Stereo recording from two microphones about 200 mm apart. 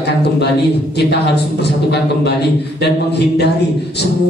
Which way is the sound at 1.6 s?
55° left (ahead or behind).